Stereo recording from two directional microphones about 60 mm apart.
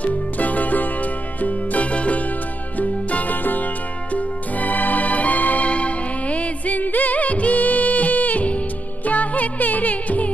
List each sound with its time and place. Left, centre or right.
0.0 s music: left